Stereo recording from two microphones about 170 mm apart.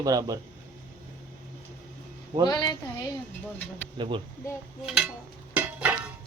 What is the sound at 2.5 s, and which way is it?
Speech, 25° left (ahead or behind).